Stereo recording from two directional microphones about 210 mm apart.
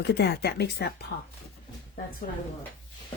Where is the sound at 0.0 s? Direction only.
50° left (ahead or behind).